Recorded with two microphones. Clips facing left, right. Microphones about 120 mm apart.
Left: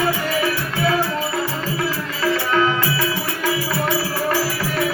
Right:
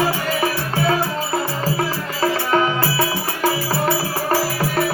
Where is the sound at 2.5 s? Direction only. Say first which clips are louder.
Right 1 dB; 35° right (ahead or behind).